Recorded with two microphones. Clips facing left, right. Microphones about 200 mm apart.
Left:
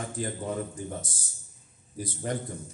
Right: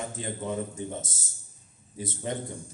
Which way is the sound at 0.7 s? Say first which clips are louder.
Right 1 dB; 25° right (ahead or behind).